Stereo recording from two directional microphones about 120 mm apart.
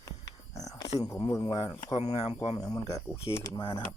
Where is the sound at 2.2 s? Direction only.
55° left (ahead or behind).